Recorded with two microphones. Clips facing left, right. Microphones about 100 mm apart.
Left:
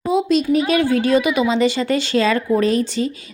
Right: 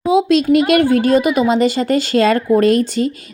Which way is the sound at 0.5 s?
60° right (ahead or behind).